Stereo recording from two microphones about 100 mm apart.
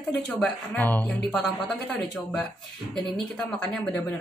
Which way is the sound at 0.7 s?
20° left (ahead or behind).